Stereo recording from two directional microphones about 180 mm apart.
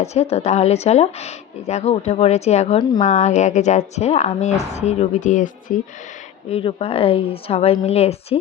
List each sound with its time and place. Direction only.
0.0 s speech: 35° left (ahead or behind)
6.5 s speech: 30° left (ahead or behind)